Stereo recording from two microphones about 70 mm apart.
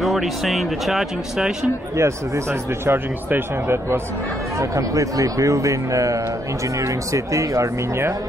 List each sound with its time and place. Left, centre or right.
0.0 s speech: centre
2.0 s speech: right
4.6 s speech: right